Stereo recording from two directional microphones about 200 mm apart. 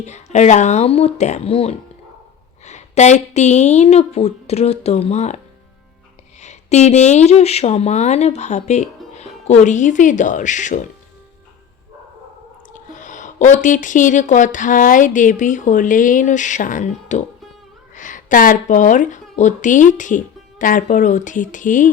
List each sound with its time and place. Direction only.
0.0 s speech: 35° left (ahead or behind)
6.4 s speech: 35° left (ahead or behind)
12.7 s speech: 40° left (ahead or behind)